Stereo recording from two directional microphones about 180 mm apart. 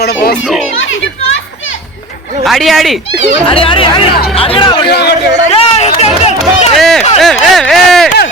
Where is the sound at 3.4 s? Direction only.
30° left (ahead or behind).